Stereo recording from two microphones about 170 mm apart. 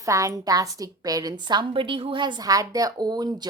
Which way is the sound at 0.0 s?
20° right (ahead or behind).